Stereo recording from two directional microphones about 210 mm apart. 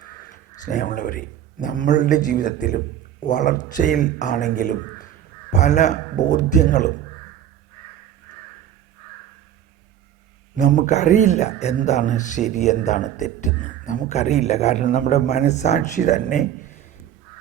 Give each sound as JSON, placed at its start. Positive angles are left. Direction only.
{"t": 0.6, "sound": "speech", "side_deg": 35}
{"t": 10.6, "sound": "speech", "side_deg": 35}